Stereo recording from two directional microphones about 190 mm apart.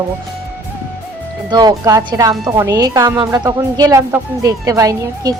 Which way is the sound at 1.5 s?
20° right (ahead or behind).